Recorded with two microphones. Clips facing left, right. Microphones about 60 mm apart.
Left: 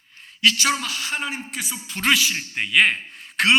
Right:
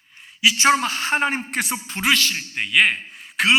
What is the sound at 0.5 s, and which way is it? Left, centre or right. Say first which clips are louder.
Speech: right 6 dB; right.